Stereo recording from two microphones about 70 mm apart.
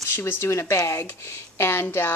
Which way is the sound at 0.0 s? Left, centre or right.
Left.